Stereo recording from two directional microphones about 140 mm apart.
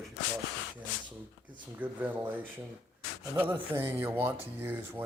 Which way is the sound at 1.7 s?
15° right (ahead or behind).